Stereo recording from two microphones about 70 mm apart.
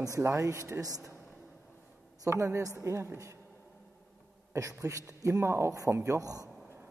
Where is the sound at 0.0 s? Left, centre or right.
Right.